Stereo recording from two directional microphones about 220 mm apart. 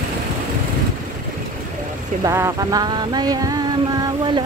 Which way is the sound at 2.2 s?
15° right (ahead or behind).